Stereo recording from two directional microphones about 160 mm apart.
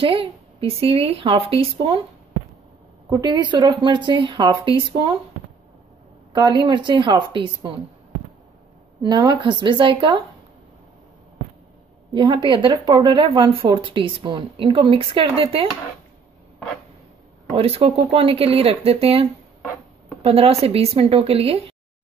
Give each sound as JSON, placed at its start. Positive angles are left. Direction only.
{"t": 0.0, "sound": "speech", "side_deg": -35}
{"t": 3.1, "sound": "speech", "side_deg": -25}
{"t": 6.3, "sound": "speech", "side_deg": -25}
{"t": 9.0, "sound": "speech", "side_deg": -25}
{"t": 12.1, "sound": "a woman's voice", "side_deg": -30}
{"t": 17.6, "sound": "speech", "side_deg": -35}